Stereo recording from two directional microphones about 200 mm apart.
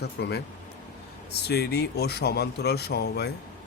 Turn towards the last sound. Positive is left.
turn(degrees=55)  # may be behind; listen again after turning